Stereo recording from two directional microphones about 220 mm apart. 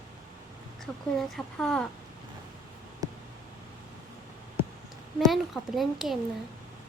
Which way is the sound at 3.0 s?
15° right (ahead or behind).